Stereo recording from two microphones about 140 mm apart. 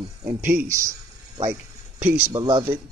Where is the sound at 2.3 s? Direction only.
30° right (ahead or behind).